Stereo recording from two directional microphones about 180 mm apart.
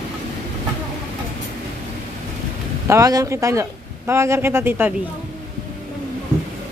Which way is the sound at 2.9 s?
20° right (ahead or behind).